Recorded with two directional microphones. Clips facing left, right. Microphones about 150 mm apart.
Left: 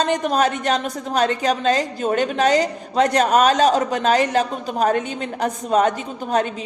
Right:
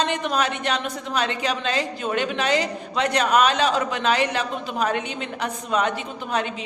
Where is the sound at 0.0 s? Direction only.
40° left (ahead or behind).